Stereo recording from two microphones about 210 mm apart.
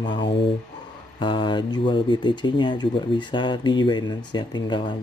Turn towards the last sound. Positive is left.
turn(degrees=20)  # may be behind; listen again after turning